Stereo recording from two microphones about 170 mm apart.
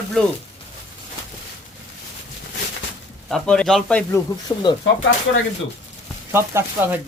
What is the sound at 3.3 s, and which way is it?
Speech, 5° left (ahead or behind).